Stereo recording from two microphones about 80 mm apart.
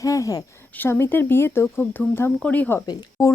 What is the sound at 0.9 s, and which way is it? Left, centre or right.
Speech, left.